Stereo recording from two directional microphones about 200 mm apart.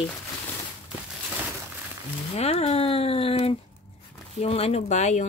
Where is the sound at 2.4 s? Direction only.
30° left (ahead or behind).